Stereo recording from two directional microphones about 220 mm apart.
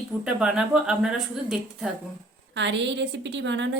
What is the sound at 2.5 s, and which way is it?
A woman's voice, 55° right (ahead or behind).